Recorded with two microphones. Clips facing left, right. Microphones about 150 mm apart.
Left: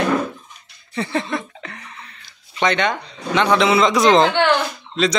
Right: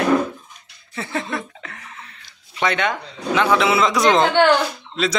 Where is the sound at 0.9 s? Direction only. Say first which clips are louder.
Left 3 dB; centre (ahead or behind).